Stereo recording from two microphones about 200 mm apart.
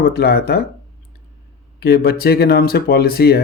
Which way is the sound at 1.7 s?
50° left (ahead or behind).